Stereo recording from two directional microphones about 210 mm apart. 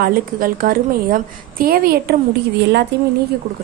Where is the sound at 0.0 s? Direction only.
45° right (ahead or behind).